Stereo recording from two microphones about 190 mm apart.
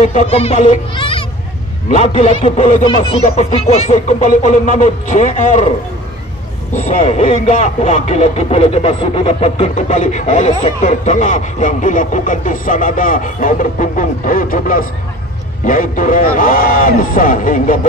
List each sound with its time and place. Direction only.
0.0 s speech: 35° left (ahead or behind)
6.7 s a man's voice: 35° left (ahead or behind)